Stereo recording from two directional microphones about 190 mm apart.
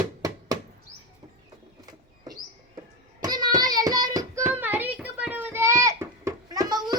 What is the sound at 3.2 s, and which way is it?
Child singing, 20° right (ahead or behind).